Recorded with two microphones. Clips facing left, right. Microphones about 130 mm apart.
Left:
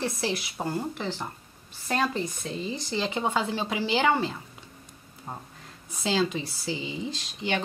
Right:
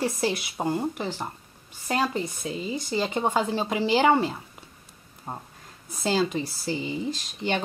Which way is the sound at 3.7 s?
30° right (ahead or behind).